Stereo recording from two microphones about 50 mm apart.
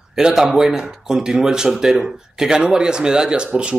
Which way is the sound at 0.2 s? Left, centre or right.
Centre.